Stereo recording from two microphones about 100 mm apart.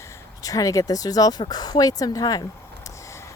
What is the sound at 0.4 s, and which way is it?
Speech, 35° left (ahead or behind).